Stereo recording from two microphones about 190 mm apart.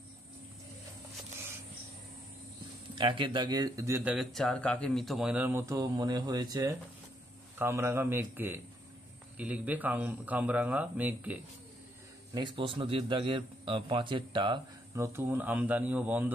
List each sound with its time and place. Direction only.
3.0 s speech: 25° right (ahead or behind); by 11.3 s 10° right (ahead or behind)
12.4 s a man's voice: 25° right (ahead or behind)
15.1 s speech: 10° right (ahead or behind)